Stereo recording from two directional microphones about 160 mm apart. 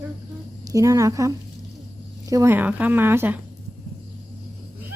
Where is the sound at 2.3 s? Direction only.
15° right (ahead or behind).